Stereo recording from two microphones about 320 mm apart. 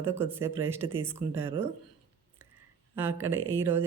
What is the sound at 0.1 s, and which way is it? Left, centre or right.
Speech, centre.